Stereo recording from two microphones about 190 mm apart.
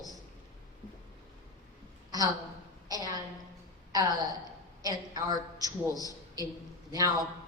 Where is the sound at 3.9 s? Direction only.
20° right (ahead or behind).